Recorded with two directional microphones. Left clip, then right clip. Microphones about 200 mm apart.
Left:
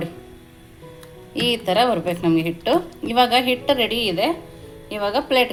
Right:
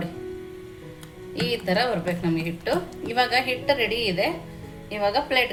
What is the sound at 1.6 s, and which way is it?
Speech, 40° left (ahead or behind).